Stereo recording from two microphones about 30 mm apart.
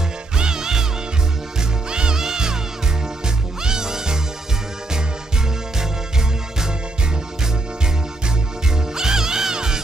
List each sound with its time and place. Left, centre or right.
0.4 s music: right
1.9 s music: right
3.6 s music: right
8.9 s music: centre